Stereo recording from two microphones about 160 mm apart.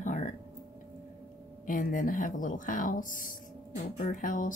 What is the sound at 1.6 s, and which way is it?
Speech, 55° left (ahead or behind).